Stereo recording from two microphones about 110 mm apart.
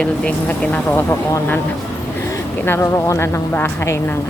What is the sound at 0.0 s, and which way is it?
Speech, 10° left (ahead or behind).